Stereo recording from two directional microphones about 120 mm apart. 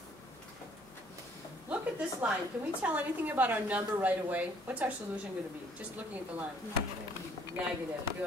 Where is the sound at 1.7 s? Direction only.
10° right (ahead or behind).